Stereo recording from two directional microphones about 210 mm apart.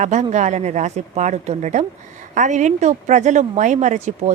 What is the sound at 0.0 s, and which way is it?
Speech, 35° right (ahead or behind).